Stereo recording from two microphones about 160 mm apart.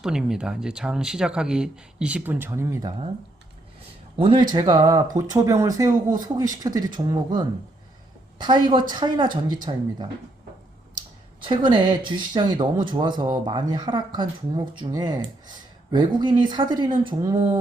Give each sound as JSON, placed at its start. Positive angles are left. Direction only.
{"t": 0.0, "sound": "speech", "side_deg": -5}
{"t": 4.2, "sound": "speech", "side_deg": -30}
{"t": 8.4, "sound": "speech", "side_deg": -30}
{"t": 11.4, "sound": "speech", "side_deg": -30}